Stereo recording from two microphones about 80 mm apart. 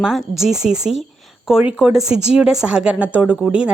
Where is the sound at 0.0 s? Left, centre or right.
Centre.